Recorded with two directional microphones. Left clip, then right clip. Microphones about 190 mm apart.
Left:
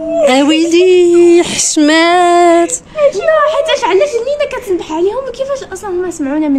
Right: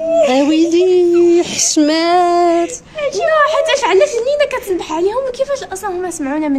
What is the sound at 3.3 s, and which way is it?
A woman's voice, 15° right (ahead or behind).